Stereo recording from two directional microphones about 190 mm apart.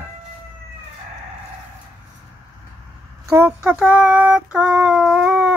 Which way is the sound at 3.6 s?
5° right (ahead or behind).